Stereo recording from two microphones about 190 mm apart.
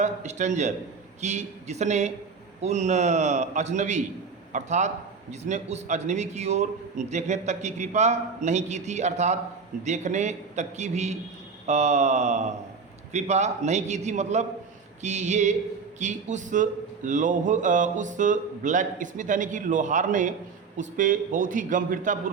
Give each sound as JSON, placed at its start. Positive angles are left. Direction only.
{"t": 0.0, "sound": "a man's voice", "side_deg": -40}